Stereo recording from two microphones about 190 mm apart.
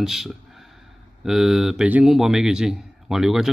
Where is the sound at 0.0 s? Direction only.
Centre (ahead or behind).